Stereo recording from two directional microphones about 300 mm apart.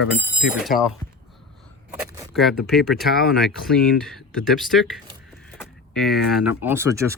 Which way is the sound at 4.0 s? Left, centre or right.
Centre.